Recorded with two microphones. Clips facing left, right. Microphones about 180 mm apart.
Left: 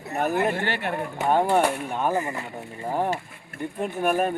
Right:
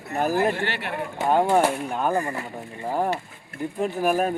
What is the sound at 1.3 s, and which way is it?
Speech, centre (ahead or behind).